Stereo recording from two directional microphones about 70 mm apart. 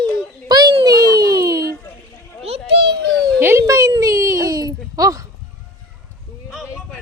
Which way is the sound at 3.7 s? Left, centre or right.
Right.